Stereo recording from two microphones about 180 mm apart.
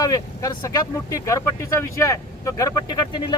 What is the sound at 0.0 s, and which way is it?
Speech, 20° left (ahead or behind).